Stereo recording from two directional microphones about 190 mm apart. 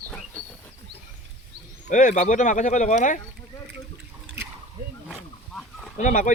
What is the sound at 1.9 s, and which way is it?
Speech, 40° left (ahead or behind).